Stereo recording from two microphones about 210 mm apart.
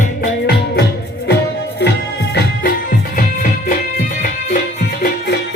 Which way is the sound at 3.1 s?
40° left (ahead or behind).